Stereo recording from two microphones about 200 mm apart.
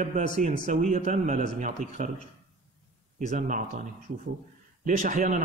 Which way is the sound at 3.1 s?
40° right (ahead or behind).